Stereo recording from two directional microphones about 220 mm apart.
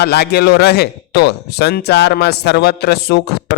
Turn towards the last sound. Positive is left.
turn(degrees=50)  # may be behind; listen again after turning